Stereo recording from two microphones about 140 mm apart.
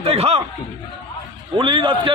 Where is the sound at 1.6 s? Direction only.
35° right (ahead or behind).